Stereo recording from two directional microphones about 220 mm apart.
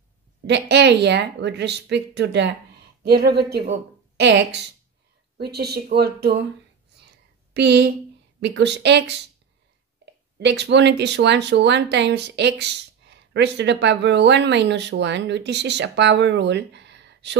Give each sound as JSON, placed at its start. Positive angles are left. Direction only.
{"t": 0.5, "sound": "speech", "side_deg": -50}
{"t": 7.5, "sound": "speech", "side_deg": -50}
{"t": 10.0, "sound": "a sound", "side_deg": -50}
{"t": 10.4, "sound": "speech", "side_deg": -50}